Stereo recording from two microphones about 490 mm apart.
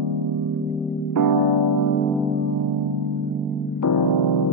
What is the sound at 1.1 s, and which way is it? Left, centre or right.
Music, left.